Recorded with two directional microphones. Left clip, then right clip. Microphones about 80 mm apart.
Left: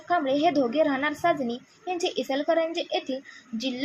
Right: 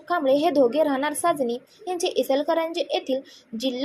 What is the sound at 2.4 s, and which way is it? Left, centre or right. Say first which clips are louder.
Speech: right 1 dB; left.